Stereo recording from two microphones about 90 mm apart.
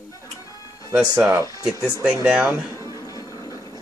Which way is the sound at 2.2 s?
10° right (ahead or behind).